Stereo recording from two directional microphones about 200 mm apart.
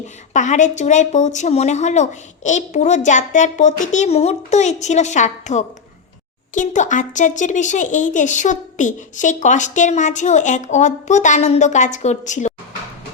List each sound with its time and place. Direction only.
0.3 s a child's voice: 35° left (ahead or behind)